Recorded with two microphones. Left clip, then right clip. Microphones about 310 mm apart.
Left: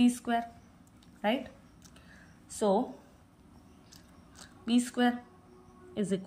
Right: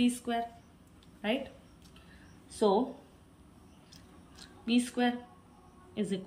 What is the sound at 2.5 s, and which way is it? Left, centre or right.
Speech, left.